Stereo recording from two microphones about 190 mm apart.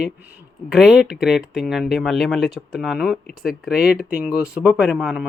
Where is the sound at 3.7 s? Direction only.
55° left (ahead or behind).